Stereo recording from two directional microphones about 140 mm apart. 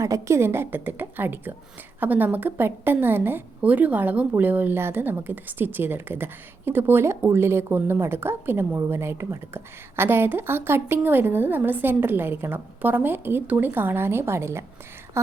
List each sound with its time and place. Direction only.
0.0 s a woman's voice: 20° right (ahead or behind)